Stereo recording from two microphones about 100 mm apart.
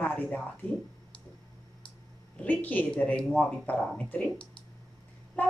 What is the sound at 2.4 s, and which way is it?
Speech, 20° left (ahead or behind).